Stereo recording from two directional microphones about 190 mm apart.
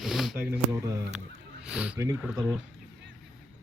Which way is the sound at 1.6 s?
5° right (ahead or behind).